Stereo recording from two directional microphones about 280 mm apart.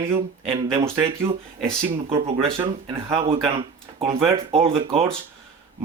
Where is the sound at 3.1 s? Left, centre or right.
Centre.